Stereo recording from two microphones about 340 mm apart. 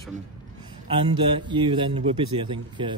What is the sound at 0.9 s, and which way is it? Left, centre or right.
Speech, centre.